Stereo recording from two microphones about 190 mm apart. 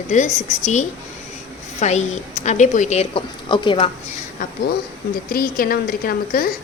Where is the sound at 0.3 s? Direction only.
40° left (ahead or behind).